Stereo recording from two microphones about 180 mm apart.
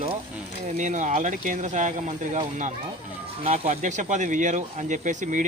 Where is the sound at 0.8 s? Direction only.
45° right (ahead or behind).